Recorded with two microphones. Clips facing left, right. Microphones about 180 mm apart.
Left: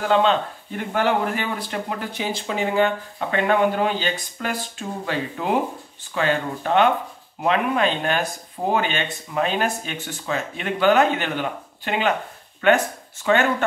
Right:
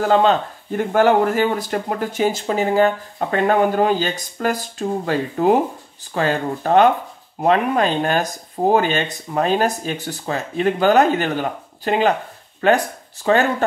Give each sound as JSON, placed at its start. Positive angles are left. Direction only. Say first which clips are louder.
{"t": 0.0, "sound": "speech", "louder": "right 3 dB", "side_deg": -40}